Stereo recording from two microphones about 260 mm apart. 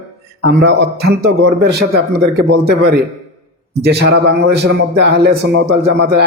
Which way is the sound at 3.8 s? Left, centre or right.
Right.